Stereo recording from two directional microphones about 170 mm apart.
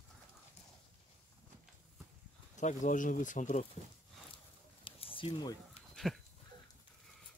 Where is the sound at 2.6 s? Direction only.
45° left (ahead or behind).